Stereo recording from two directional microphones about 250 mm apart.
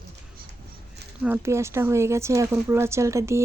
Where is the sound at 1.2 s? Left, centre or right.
Centre.